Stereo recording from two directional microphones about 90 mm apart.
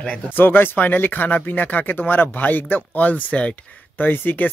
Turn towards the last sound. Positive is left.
turn(degrees=20)  # may be behind; listen again after turning